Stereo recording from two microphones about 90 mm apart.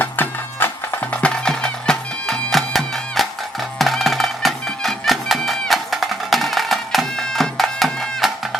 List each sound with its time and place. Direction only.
0.0 s music: 20° left (ahead or behind)
1.2 s music: 10° left (ahead or behind)